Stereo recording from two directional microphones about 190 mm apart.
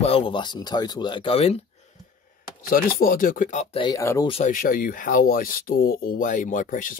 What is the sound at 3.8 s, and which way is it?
Speech, 15° left (ahead or behind).